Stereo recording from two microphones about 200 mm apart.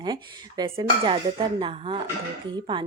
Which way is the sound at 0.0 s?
20° right (ahead or behind).